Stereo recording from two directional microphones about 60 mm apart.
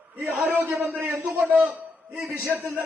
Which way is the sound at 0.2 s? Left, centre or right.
Right.